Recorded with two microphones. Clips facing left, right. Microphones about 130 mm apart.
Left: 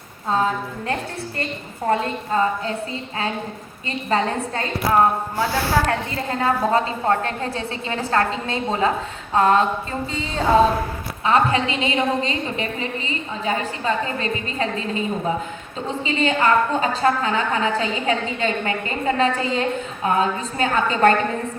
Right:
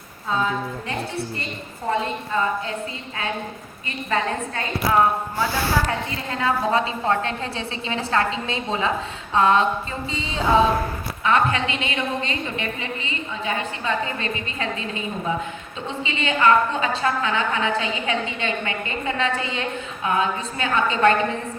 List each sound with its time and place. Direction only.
0.3 s a woman's voice: 40° left (ahead or behind)
2.3 s a woman's voice: 40° left (ahead or behind)
4.1 s a woman's voice: 35° left (ahead or behind)
5.4 s speech: 60° left (ahead or behind)
6.3 s a woman's voice: 40° left (ahead or behind)
11.2 s a woman's voice: 35° left (ahead or behind)